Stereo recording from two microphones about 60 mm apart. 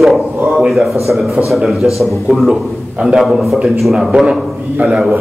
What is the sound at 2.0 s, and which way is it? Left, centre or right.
A man's voice, centre.